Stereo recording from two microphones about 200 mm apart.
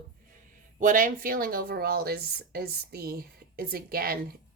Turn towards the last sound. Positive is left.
turn(degrees=-50)  # may be behind; listen again after turning